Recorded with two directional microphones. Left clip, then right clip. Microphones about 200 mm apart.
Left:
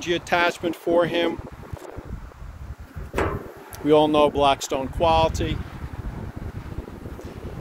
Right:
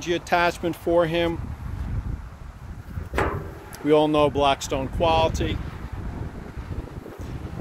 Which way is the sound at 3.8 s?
5° left (ahead or behind).